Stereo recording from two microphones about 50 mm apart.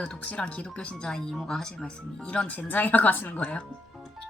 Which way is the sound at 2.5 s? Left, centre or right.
Left.